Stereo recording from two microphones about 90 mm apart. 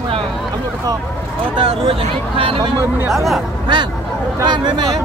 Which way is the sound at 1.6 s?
85° right.